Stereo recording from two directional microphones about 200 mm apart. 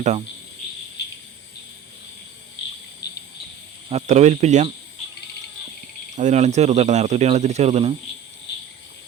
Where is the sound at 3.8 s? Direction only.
35° right (ahead or behind).